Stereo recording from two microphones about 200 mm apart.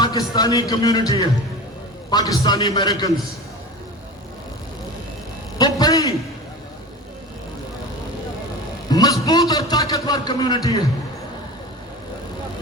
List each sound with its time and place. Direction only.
0.0 s a man's voice: 20° left (ahead or behind)
5.5 s a sound: 20° left (ahead or behind)
8.9 s a man's voice: 20° left (ahead or behind)